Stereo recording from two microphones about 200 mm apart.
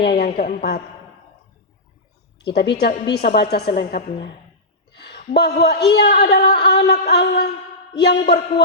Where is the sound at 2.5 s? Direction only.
55° left (ahead or behind).